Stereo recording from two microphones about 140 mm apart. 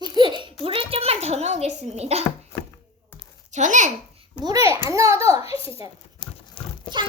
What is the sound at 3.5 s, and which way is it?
Speech, 60° right (ahead or behind).